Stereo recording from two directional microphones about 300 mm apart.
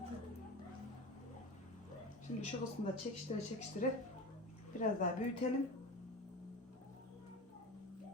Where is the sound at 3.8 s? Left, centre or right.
Left.